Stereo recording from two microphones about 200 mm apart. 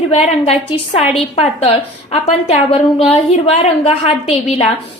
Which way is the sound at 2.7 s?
30° left (ahead or behind).